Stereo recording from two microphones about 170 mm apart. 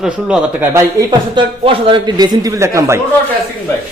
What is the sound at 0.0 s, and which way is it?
A man's voice, 10° right (ahead or behind).